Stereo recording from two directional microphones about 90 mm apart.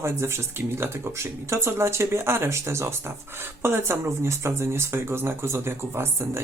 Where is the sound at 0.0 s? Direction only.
30° right (ahead or behind).